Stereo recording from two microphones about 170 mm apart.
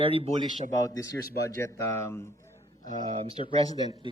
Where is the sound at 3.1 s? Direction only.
35° right (ahead or behind).